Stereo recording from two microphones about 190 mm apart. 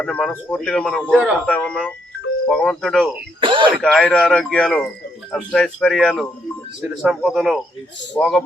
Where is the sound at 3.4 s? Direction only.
25° right (ahead or behind).